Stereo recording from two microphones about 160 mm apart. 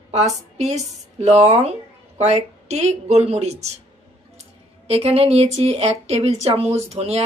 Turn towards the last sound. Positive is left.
turn(degrees=-40)  # may be behind; listen again after turning